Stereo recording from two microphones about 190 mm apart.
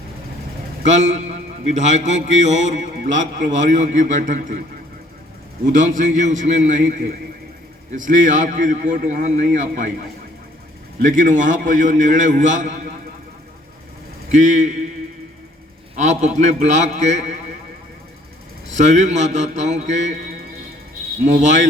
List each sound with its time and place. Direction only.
0.8 s a man's voice: 40° right (ahead or behind)
5.7 s a man's voice: 40° right (ahead or behind)
11.0 s a man's voice: 45° right (ahead or behind)
14.3 s a man's voice: 40° right (ahead or behind)
16.0 s a man's voice: 40° right (ahead or behind)
18.7 s a man's voice: 40° right (ahead or behind)
21.3 s a man's voice: 40° right (ahead or behind)